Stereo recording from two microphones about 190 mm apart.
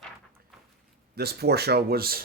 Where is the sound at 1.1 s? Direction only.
55° right (ahead or behind).